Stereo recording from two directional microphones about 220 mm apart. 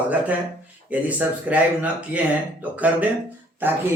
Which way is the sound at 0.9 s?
5° right (ahead or behind).